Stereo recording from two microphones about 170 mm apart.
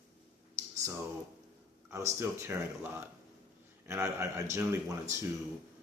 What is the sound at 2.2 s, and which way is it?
A man's voice, 15° right (ahead or behind).